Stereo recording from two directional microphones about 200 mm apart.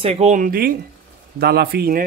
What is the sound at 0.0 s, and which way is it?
Speech, 30° right (ahead or behind).